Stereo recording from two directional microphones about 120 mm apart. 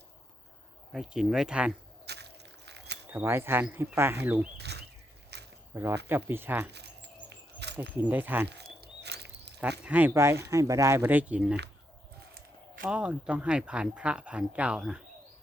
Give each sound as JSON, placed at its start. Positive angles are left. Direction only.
{"t": 0.9, "sound": "speech", "side_deg": -5}
{"t": 3.1, "sound": "speech", "side_deg": -20}
{"t": 5.7, "sound": "speech", "side_deg": -20}
{"t": 7.8, "sound": "speech", "side_deg": -15}
{"t": 9.6, "sound": "speech", "side_deg": -15}
{"t": 12.8, "sound": "speech", "side_deg": -10}